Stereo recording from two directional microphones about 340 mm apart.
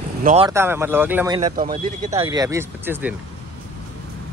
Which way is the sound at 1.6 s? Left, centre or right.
Right.